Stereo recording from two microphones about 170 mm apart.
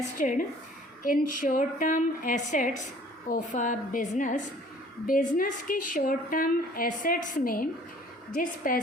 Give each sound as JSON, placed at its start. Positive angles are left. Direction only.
{"t": 0.2, "sound": "a woman's voice", "side_deg": 50}